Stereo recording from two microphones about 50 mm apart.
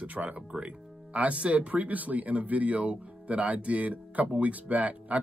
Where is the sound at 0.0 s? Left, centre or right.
Right.